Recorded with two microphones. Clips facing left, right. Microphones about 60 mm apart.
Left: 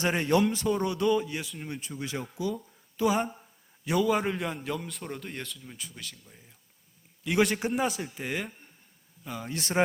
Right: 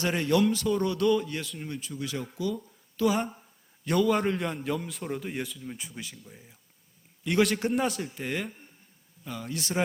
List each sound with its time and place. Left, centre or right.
0.2 s speech: left
0.8 s speech: centre
1.6 s speech: left
3.8 s a man's voice: centre
5.7 s speech: centre
7.3 s a man's voice: centre
9.5 s speech: left